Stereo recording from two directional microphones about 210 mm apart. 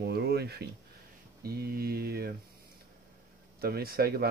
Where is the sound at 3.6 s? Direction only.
45° right (ahead or behind).